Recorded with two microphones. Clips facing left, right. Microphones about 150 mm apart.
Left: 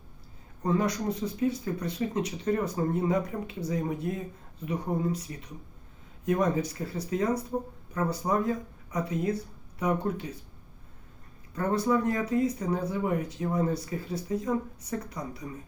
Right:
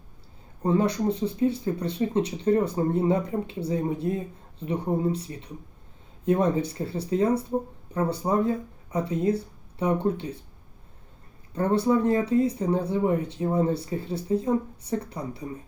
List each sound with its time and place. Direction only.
0.6 s speech: 30° right (ahead or behind)
11.5 s speech: 30° right (ahead or behind)